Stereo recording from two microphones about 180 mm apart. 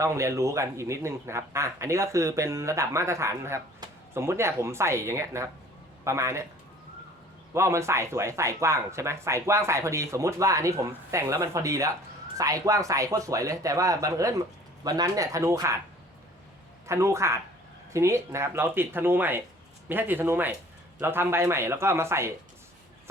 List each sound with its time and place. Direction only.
0.0 s a man's voice: 15° right (ahead or behind)
7.5 s a man's voice: 15° right (ahead or behind)
16.8 s a man's voice: 15° right (ahead or behind)